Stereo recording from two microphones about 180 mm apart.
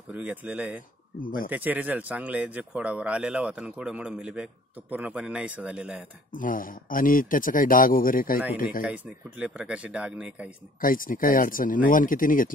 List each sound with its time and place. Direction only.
0.1 s speech: 10° right (ahead or behind)
1.2 s speech: 50° left (ahead or behind)
1.5 s speech: 10° right (ahead or behind)
6.3 s speech: 50° left (ahead or behind)
8.8 s speech: 5° right (ahead or behind)
10.8 s speech: 50° left (ahead or behind)